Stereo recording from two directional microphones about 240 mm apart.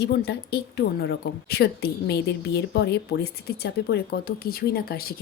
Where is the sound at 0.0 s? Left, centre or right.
Left.